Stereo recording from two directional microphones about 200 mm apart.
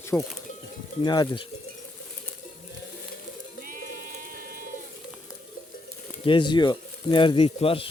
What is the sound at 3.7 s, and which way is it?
Pigeon, 40° right (ahead or behind).